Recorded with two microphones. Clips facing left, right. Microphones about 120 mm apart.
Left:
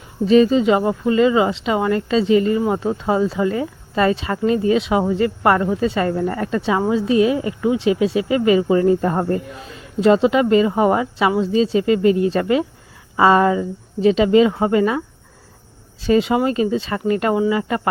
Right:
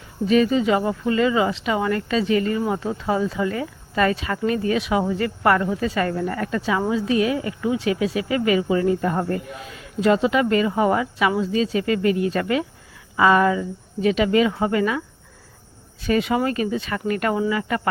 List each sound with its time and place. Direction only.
0.3 s speech: 25° left (ahead or behind)